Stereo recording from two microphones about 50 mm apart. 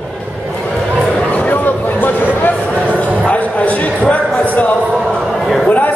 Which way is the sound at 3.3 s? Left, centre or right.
Left.